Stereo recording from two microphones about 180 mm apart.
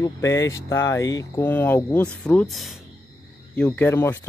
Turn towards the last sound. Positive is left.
turn(degrees=10)  # may be behind; listen again after turning